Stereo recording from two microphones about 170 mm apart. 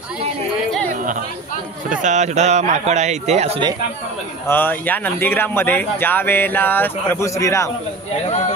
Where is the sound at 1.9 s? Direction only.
45° right (ahead or behind).